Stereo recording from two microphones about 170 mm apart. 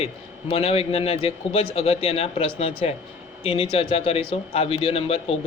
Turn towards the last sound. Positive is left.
turn(degrees=35)  # may be behind; listen again after turning